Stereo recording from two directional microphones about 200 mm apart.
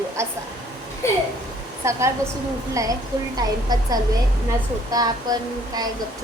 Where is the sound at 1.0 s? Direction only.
15° left (ahead or behind).